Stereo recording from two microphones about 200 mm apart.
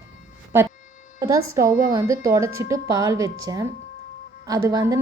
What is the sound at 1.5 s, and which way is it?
A woman's voice, 15° right (ahead or behind).